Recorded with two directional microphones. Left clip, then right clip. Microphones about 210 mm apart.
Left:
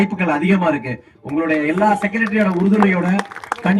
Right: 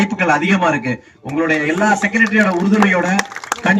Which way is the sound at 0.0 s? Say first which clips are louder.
Right 3 dB; 55° left (ahead or behind).